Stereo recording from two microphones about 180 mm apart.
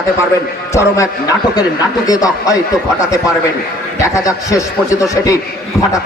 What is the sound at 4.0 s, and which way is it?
Speech, 15° left (ahead or behind).